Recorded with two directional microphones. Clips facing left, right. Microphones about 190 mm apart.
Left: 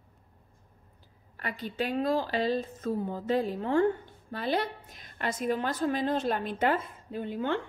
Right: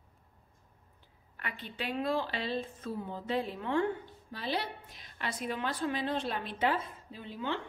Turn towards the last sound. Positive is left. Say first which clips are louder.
# left 6 dB
turn(degrees=50)  # may be behind; listen again after turning